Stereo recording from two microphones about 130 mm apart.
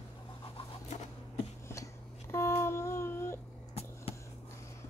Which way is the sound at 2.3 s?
20° left (ahead or behind).